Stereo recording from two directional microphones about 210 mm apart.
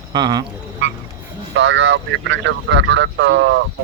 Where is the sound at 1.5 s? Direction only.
60° right (ahead or behind).